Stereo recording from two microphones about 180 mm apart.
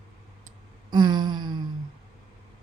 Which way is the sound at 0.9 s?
25° right (ahead or behind).